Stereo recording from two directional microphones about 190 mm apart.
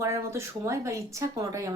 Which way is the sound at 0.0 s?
15° right (ahead or behind).